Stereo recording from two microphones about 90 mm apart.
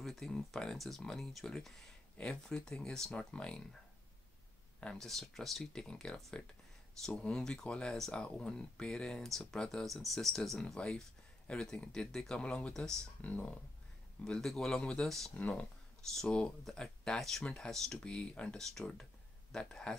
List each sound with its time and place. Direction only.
0.0 s speech: 5° left (ahead or behind)
4.7 s speech: 10° left (ahead or behind)
13.2 s speech: 15° left (ahead or behind)
14.2 s speech: 5° left (ahead or behind)
15.3 s speech: 15° left (ahead or behind)